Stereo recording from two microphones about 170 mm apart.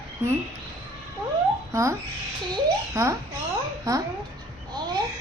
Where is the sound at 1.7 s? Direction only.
20° right (ahead or behind).